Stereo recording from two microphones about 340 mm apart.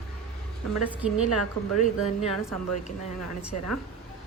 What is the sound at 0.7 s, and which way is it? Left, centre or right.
Speech, centre.